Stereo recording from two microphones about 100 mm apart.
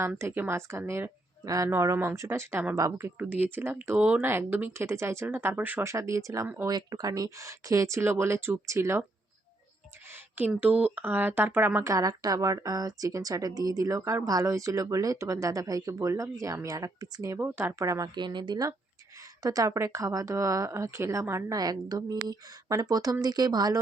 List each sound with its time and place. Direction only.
0.2 s speech: 25° right (ahead or behind)
3.2 s speech: 20° right (ahead or behind)
5.9 s a woman's voice: 30° right (ahead or behind)
10.6 s speech: 15° right (ahead or behind)
11.8 s a woman's voice: 35° right (ahead or behind)
17.3 s a woman's voice: 20° right (ahead or behind)
21.6 s a woman's voice: 40° right (ahead or behind)